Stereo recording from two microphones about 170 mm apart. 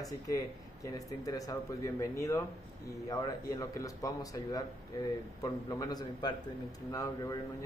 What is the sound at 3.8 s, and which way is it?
Speech, 20° left (ahead or behind).